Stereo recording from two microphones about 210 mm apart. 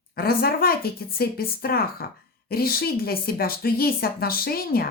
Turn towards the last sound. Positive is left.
turn(degrees=45)  # may be behind; listen again after turning